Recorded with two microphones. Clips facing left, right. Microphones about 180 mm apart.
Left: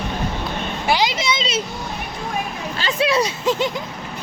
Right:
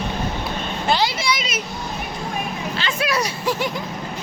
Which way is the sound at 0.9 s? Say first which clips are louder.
Left 1 dB; 15° left (ahead or behind).